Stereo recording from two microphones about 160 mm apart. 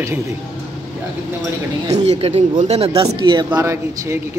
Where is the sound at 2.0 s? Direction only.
40° right (ahead or behind).